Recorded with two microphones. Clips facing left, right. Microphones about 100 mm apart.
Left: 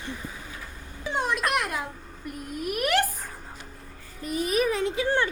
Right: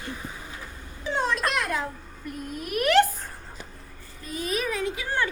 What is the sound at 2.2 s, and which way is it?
A child's voice, 5° left (ahead or behind).